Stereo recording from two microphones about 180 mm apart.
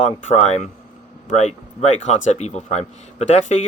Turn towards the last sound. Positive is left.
turn(degrees=40)  # may be behind; listen again after turning